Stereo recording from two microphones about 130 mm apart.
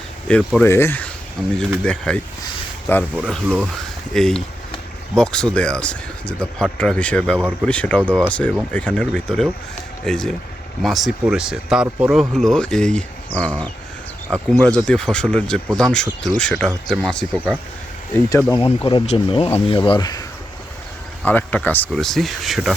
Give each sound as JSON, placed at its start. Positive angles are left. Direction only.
{"t": 0.3, "sound": "speech", "side_deg": 10}
{"t": 3.4, "sound": "speech", "side_deg": -10}
{"t": 4.1, "sound": "speech", "side_deg": 5}
{"t": 18.5, "sound": "speech", "side_deg": 40}
{"t": 21.2, "sound": "speech", "side_deg": 15}
{"t": 21.9, "sound": "speech", "side_deg": 0}